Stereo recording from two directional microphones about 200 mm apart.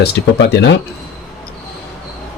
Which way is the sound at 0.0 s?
55° left (ahead or behind).